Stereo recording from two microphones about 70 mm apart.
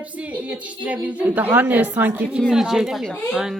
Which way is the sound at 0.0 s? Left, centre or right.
Right.